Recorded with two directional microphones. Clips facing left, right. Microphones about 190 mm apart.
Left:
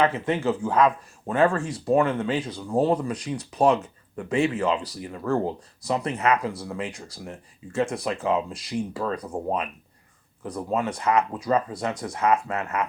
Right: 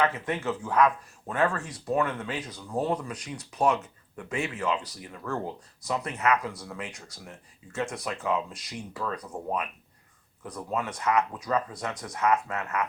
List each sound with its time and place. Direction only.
0.0 s speech: 30° left (ahead or behind)
10.4 s speech: 30° left (ahead or behind)